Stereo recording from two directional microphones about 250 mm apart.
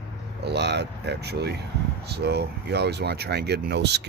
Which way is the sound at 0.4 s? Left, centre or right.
Right.